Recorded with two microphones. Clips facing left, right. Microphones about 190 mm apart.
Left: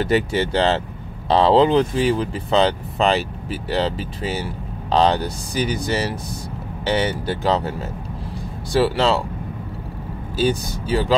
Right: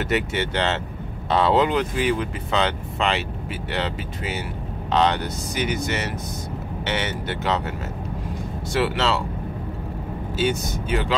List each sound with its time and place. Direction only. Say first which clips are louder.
0.0 s speech: left 5 dB; 35° left (ahead or behind)
8.7 s speech: left 5 dB; 35° left (ahead or behind)
10.3 s speech: left 3 dB; 35° left (ahead or behind)